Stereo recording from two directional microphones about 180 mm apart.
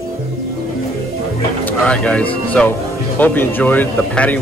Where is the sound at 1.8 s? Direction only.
5° left (ahead or behind).